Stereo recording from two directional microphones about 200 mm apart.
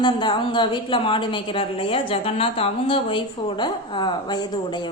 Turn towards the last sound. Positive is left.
turn(degrees=20)  # may be behind; listen again after turning